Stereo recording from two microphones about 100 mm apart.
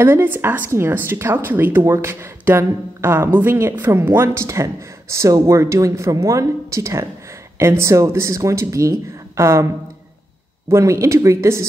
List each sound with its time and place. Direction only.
0.0 s a woman's voice: 25° right (ahead or behind)
10.7 s a woman's voice: 30° right (ahead or behind)